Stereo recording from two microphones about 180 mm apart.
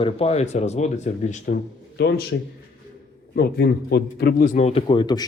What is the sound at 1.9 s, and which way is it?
Speech, 65° left (ahead or behind).